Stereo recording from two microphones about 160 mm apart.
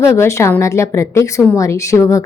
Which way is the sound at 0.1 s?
20° left (ahead or behind).